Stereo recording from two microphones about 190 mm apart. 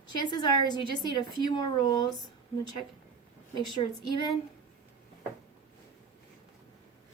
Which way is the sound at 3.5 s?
25° left (ahead or behind).